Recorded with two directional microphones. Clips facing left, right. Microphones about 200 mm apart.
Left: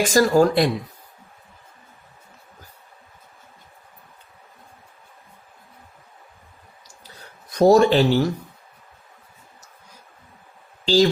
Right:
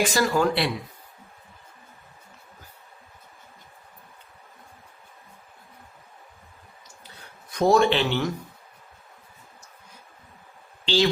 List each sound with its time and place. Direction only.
0.0 s speech: 40° left (ahead or behind)
7.5 s speech: 40° left (ahead or behind)
10.8 s speech: 40° left (ahead or behind)